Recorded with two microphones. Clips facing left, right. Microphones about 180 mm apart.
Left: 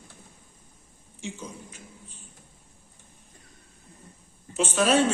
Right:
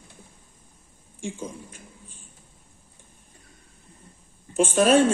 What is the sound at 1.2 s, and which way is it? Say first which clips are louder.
Speech: right 4 dB; 50° right (ahead or behind).